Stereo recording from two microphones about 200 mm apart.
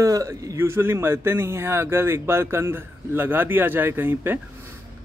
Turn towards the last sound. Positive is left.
turn(degrees=-10)  # may be behind; listen again after turning